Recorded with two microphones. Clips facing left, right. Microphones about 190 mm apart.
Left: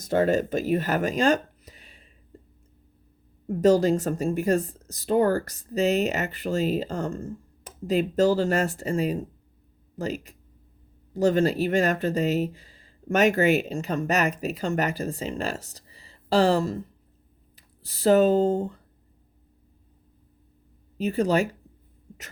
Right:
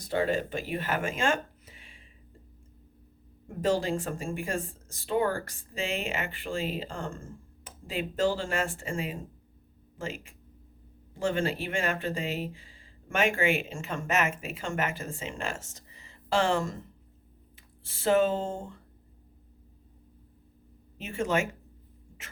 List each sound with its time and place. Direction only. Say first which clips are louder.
0.0 s speech: left 6 dB; 45° left (ahead or behind)
3.4 s speech: left 8 dB; 40° left (ahead or behind)
17.8 s speech: left 6 dB; 35° left (ahead or behind)
21.0 s speech: left 6 dB; 35° left (ahead or behind)